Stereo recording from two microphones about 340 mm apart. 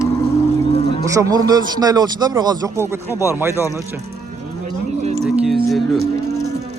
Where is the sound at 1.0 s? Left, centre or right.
Centre.